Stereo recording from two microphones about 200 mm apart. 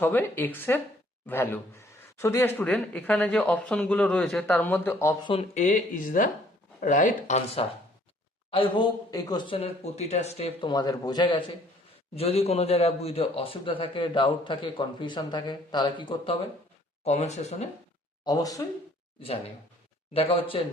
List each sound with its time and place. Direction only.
0.0 s speech: 10° left (ahead or behind)
5.3 s a man's voice: 35° left (ahead or behind)
18.3 s a man's voice: 20° left (ahead or behind)
20.1 s a man's voice: 25° left (ahead or behind)